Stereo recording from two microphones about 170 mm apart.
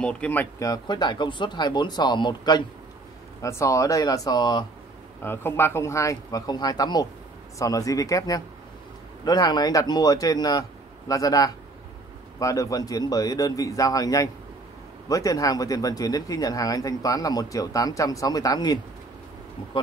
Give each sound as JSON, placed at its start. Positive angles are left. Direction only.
{"t": 0.0, "sound": "speech", "side_deg": 5}
{"t": 0.7, "sound": "speech", "side_deg": 25}